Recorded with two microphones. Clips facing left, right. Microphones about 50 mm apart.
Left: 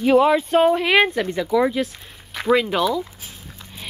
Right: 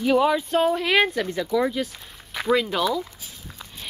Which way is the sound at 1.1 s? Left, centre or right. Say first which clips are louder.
Left 3 dB; centre.